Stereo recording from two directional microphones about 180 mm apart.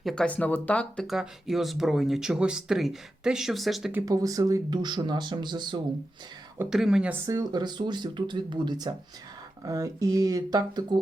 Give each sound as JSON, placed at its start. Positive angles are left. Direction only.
{"t": 0.0, "sound": "speech", "side_deg": 0}
{"t": 4.0, "sound": "speech", "side_deg": -20}
{"t": 6.6, "sound": "speech", "side_deg": 0}
{"t": 7.3, "sound": "speech", "side_deg": -20}